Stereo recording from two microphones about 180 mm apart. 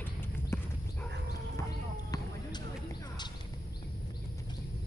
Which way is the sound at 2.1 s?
20° left (ahead or behind).